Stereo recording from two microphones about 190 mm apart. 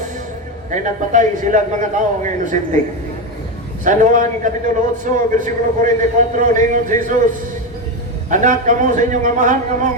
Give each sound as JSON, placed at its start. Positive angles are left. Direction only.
{"t": 0.7, "sound": "a man's voice", "side_deg": -40}
{"t": 3.8, "sound": "a man's voice", "side_deg": -40}
{"t": 8.3, "sound": "a man's voice", "side_deg": -40}